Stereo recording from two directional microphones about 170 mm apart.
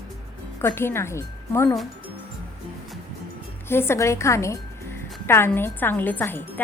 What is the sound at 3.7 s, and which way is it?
A woman's voice, 15° left (ahead or behind).